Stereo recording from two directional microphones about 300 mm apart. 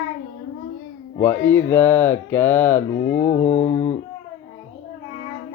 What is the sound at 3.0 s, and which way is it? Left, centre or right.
Mantra, left.